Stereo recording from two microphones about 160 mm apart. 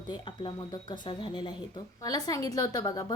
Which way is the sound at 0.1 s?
30° left (ahead or behind).